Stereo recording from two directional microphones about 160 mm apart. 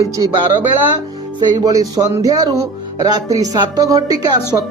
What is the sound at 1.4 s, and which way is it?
Speech, 25° right (ahead or behind).